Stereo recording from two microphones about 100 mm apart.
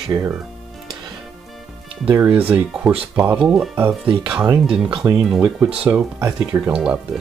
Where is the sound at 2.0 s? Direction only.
15° right (ahead or behind).